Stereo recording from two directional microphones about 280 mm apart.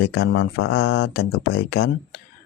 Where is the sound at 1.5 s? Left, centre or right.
Left.